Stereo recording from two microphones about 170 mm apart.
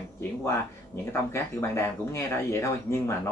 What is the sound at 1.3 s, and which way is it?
Speech, 15° left (ahead or behind).